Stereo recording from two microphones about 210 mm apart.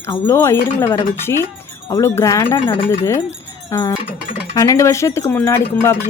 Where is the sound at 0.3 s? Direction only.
10° left (ahead or behind).